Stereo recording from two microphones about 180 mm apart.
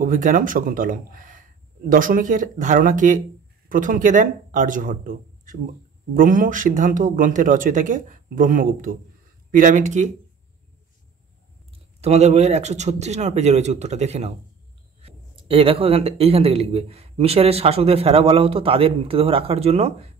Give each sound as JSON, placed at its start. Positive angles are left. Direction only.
{"t": 0.0, "sound": "speech", "side_deg": -50}
{"t": 12.0, "sound": "speech", "side_deg": -35}